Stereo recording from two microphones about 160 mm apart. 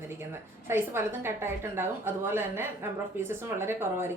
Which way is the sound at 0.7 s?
15° right (ahead or behind).